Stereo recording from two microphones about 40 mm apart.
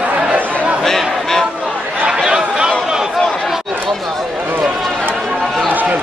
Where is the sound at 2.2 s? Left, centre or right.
Right.